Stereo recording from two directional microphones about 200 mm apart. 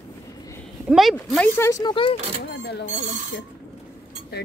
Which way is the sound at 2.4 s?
55° left (ahead or behind).